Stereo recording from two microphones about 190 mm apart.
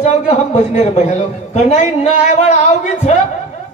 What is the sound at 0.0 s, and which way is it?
A man's voice, 35° left (ahead or behind).